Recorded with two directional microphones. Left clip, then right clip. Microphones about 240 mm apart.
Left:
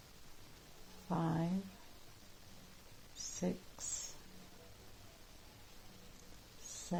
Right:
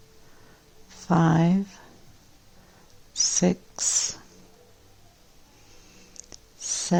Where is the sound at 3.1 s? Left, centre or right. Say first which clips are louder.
Right 19 dB; right.